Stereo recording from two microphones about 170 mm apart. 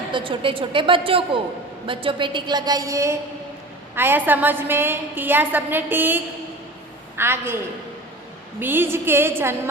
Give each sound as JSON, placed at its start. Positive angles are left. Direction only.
{"t": 0.1, "sound": "a woman's voice", "side_deg": -30}